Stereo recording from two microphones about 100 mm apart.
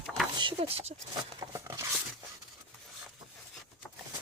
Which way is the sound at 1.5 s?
30° right (ahead or behind).